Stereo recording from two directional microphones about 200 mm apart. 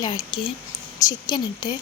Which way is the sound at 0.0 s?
20° left (ahead or behind).